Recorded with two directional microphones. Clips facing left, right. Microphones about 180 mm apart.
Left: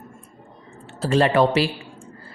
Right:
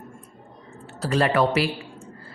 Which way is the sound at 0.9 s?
25° left (ahead or behind).